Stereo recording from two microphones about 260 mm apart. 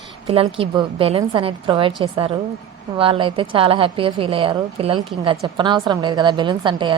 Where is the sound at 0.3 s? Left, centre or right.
Right.